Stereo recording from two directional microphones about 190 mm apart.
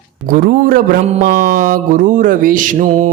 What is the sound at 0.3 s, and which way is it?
Mantra, 45° right (ahead or behind).